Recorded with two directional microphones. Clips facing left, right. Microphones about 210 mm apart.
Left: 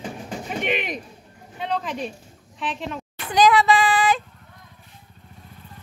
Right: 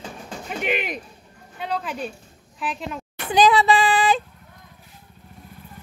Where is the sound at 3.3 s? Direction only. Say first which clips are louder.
Even; 25° right (ahead or behind).